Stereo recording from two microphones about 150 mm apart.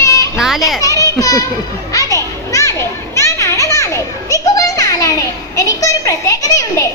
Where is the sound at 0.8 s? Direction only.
20° left (ahead or behind).